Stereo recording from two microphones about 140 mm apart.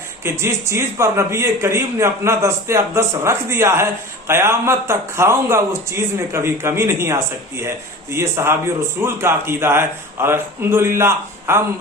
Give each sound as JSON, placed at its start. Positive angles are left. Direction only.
{"t": 0.3, "sound": "a man's voice", "side_deg": -20}